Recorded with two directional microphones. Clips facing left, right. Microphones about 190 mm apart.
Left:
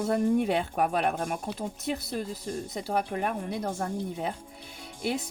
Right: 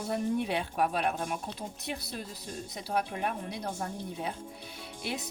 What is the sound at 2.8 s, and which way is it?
A woman's voice, 50° left (ahead or behind).